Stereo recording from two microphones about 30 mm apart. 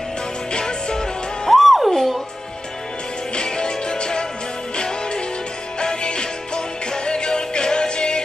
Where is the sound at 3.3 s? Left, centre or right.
Left.